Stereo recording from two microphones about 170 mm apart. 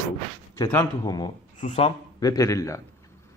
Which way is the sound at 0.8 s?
25° left (ahead or behind).